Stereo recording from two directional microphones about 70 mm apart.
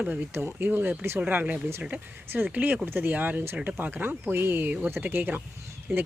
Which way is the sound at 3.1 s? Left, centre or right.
Right.